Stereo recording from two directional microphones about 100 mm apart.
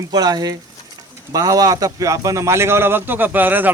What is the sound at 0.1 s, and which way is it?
A man's voice, 45° right (ahead or behind).